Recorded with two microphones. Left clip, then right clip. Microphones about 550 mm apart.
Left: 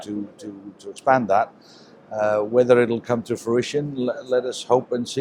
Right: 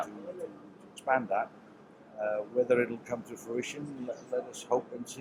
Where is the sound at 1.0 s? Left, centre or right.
Left.